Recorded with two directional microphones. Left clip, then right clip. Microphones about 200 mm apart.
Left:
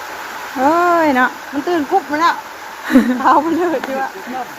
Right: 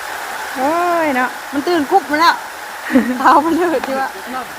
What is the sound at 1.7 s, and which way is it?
Speech, 60° right (ahead or behind).